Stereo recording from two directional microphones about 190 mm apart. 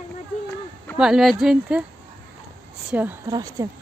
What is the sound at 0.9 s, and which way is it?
Speech, 5° right (ahead or behind).